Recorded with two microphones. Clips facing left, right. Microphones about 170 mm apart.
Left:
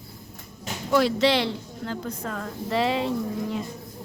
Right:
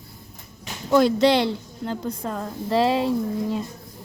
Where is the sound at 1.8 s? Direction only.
30° right (ahead or behind).